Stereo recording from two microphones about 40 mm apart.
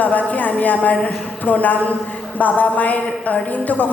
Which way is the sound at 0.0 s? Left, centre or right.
Left.